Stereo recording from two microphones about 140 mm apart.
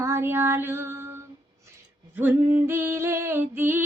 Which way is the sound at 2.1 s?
15° right (ahead or behind).